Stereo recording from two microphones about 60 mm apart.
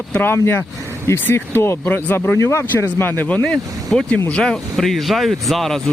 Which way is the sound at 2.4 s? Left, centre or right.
Left.